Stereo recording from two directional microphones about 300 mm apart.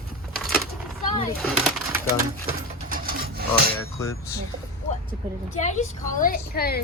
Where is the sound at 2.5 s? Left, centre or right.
Right.